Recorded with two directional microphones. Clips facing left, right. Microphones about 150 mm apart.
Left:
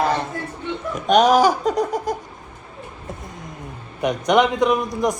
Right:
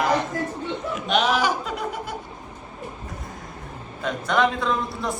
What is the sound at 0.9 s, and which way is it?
Speech, 45° left (ahead or behind).